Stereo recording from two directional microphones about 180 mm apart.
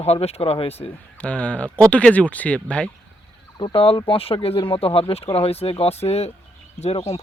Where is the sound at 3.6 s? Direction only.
30° left (ahead or behind).